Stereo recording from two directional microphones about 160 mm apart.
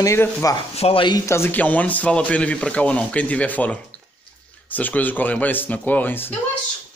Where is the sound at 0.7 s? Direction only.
35° left (ahead or behind); by 6.3 s 10° left (ahead or behind).